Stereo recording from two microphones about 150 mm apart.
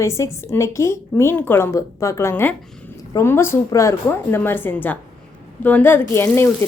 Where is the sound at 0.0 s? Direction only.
20° left (ahead or behind).